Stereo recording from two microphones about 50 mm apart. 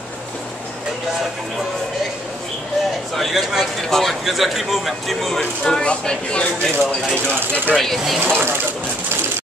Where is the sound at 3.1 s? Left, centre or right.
Centre.